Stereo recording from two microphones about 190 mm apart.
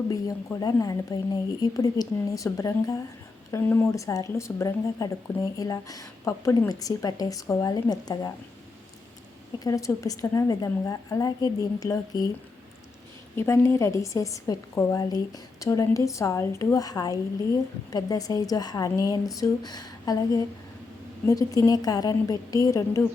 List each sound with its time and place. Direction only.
0.1 s a woman's voice: 20° left (ahead or behind)
9.6 s speech: 15° left (ahead or behind)
13.3 s a woman's voice: 15° left (ahead or behind)